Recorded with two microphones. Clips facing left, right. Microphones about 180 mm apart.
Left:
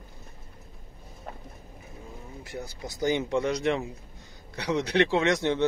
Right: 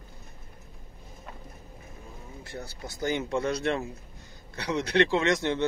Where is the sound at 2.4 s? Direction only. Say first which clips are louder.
Left 2 dB; 15° left (ahead or behind).